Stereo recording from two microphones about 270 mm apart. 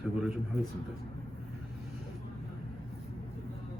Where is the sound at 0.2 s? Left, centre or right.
Centre.